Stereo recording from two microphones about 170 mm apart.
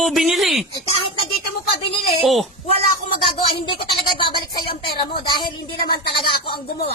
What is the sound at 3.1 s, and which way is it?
Speech, 30° left (ahead or behind).